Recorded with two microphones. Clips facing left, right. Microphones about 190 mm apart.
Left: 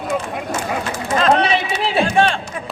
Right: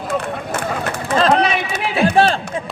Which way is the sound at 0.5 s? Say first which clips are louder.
Even; 60° right (ahead or behind).